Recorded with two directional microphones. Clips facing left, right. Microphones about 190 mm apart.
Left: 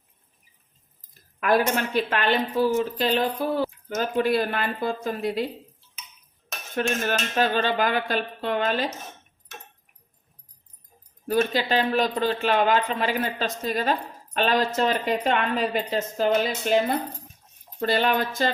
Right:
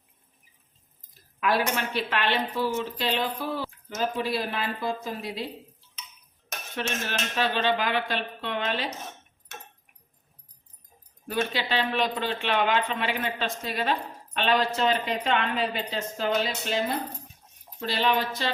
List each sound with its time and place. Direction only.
1.4 s a woman's voice: 50° left (ahead or behind)
6.7 s a woman's voice: 45° left (ahead or behind)
11.3 s a woman's voice: 45° left (ahead or behind)
17.7 s a woman's voice: 50° left (ahead or behind)